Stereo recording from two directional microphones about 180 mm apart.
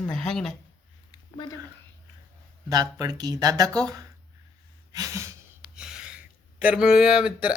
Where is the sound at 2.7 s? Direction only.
20° right (ahead or behind).